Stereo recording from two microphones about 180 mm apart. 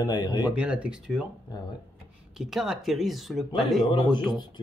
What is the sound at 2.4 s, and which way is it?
Speech, centre (ahead or behind).